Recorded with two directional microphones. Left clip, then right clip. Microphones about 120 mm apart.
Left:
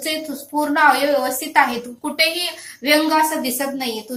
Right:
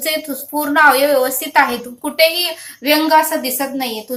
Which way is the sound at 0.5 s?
40° right (ahead or behind).